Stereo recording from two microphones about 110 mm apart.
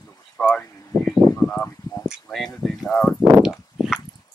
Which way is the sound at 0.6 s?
25° left (ahead or behind).